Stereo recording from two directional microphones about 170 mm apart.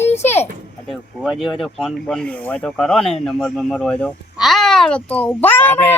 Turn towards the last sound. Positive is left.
turn(degrees=10)  # may be behind; listen again after turning